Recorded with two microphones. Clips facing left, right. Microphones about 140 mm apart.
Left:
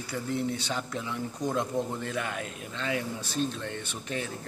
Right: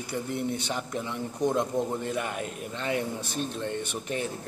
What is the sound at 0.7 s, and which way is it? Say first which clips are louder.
Speech: right 1 dB; 15° right (ahead or behind).